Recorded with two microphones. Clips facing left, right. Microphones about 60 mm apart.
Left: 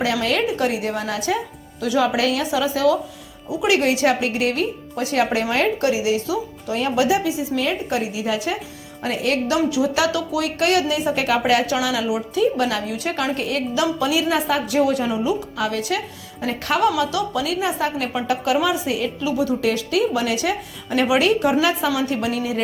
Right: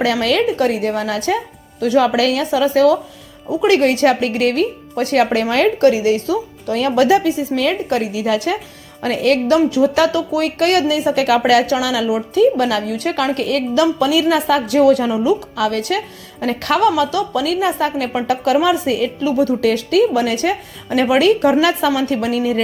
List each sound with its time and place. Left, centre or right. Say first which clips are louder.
0.0 s a woman's voice: right 5 dB; right
5.8 s a woman's voice: right 6 dB; right
6.7 s speech: right 5 dB; right
7.5 s speech: right 5 dB; right
9.6 s speech: right 6 dB; right